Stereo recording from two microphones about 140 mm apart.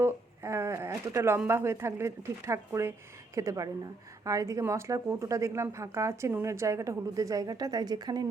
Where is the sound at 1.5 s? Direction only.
20° right (ahead or behind).